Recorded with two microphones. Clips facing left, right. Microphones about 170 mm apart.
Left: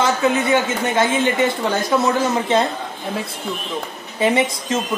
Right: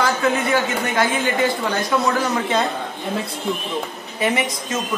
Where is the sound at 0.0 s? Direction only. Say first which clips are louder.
Left 2 dB; 20° left (ahead or behind).